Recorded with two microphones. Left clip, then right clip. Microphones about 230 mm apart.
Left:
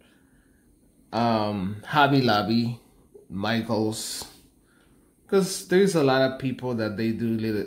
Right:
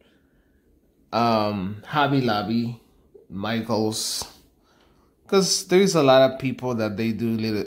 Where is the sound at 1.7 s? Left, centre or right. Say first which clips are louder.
Left 2 dB; centre.